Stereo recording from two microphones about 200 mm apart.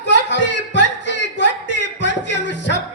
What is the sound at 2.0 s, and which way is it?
Music, 60° left (ahead or behind).